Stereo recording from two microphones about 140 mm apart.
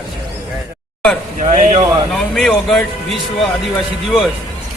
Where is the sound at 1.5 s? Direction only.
55° right (ahead or behind).